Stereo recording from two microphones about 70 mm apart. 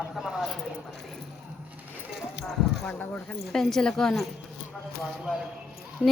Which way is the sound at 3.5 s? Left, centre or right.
Centre.